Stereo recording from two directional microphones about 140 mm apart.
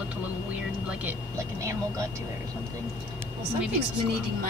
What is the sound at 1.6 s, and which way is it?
Speech, 20° right (ahead or behind).